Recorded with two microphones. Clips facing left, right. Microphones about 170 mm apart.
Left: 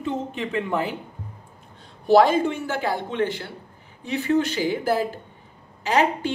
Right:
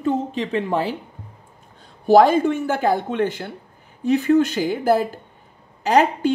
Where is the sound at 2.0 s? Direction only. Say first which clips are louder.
Right 3 dB; 45° right (ahead or behind).